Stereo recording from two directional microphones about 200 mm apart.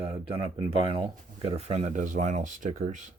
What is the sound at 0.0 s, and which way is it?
Speech, 25° right (ahead or behind).